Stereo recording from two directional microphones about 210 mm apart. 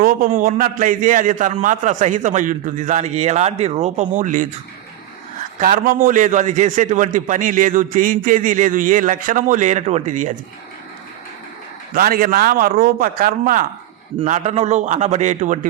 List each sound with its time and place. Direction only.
0.0 s a man's voice: 40° right (ahead or behind)
5.5 s a man's voice: 40° right (ahead or behind)
11.9 s a man's voice: 45° right (ahead or behind)